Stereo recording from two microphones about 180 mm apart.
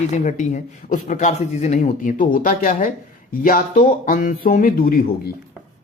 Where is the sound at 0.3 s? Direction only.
40° left (ahead or behind).